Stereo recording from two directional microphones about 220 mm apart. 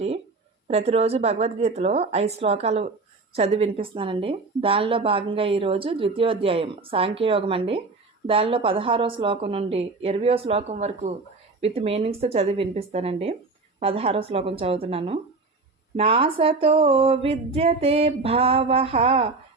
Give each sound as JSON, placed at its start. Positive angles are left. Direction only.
{"t": 0.7, "sound": "a woman's voice", "side_deg": -30}